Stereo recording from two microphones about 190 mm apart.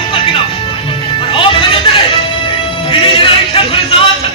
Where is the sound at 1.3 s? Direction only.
30° left (ahead or behind).